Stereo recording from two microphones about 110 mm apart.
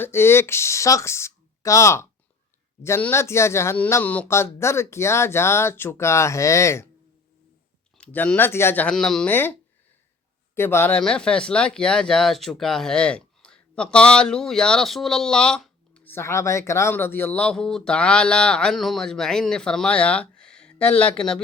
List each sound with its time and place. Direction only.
0.0 s speech: 20° left (ahead or behind)
7.9 s speech: 10° left (ahead or behind)
9.2 s speech: 20° left (ahead or behind)
11.0 s speech: 10° left (ahead or behind)
16.1 s speech: 25° left (ahead or behind)
17.4 s speech: 5° left (ahead or behind)